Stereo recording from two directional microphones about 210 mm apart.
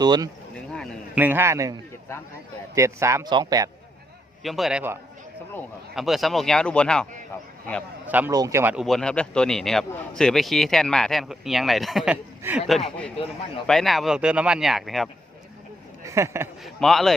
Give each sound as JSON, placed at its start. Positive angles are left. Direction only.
{"t": 0.0, "sound": "speech", "side_deg": -20}
{"t": 0.5, "sound": "a sound", "side_deg": 0}
{"t": 1.2, "sound": "speech", "side_deg": -10}
{"t": 4.4, "sound": "speech", "side_deg": 0}
{"t": 8.0, "sound": "speech", "side_deg": -10}
{"t": 16.0, "sound": "speech", "side_deg": -15}
{"t": 16.6, "sound": "speech", "side_deg": 0}